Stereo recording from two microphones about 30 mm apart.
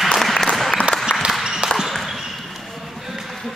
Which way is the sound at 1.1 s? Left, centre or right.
Left.